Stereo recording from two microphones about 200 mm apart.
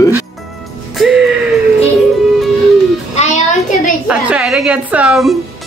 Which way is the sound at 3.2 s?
35° left (ahead or behind).